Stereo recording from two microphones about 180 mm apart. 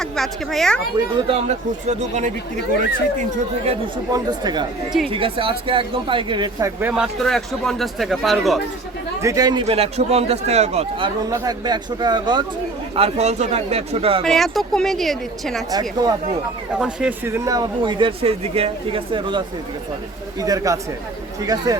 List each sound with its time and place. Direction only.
0.0 s a woman's voice: centre (ahead or behind)
1.3 s a man's voice: 35° right (ahead or behind)
4.1 s speech: 25° right (ahead or behind); by 8.6 s centre (ahead or behind)
9.2 s a man's voice: 20° right (ahead or behind); by 11.1 s 35° right (ahead or behind)
11.3 s speech: 20° right (ahead or behind)
13.0 s a man's voice: 40° right (ahead or behind)
14.3 s a woman's voice: centre (ahead or behind)
15.7 s speech: 20° right (ahead or behind)
16.7 s speech: 5° right (ahead or behind); by 19.4 s 30° right (ahead or behind)
20.4 s speech: 20° right (ahead or behind)